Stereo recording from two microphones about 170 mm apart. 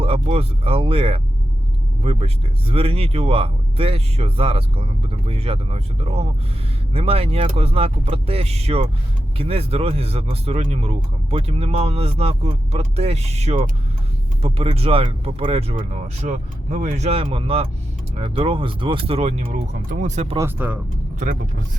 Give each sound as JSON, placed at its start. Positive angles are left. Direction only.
{"t": 0.0, "sound": "speech", "side_deg": -35}
{"t": 19.5, "sound": "speech", "side_deg": -50}
{"t": 20.3, "sound": "speech", "side_deg": -15}